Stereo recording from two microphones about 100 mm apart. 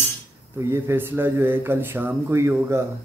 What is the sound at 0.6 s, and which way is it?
Mantra, 25° right (ahead or behind).